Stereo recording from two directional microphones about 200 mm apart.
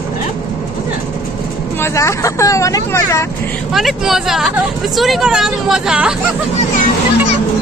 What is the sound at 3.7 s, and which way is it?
Speech, centre (ahead or behind).